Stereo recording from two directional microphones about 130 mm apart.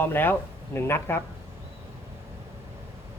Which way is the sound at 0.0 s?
15° left (ahead or behind).